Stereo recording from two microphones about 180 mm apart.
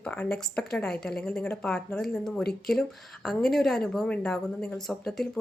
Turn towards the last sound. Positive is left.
turn(degrees=0)  # may be behind; listen again after turning